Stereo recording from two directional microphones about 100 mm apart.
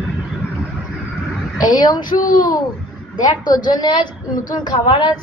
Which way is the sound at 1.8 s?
40° left (ahead or behind).